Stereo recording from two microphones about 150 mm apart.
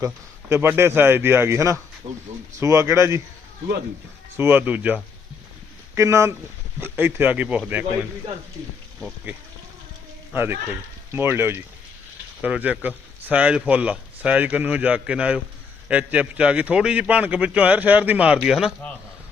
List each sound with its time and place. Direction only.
0.0 s speech: 15° right (ahead or behind)
2.0 s speech: 30° right (ahead or behind)
2.6 s speech: 20° right (ahead or behind)
4.4 s speech: 15° right (ahead or behind)
10.3 s speech: 15° right (ahead or behind)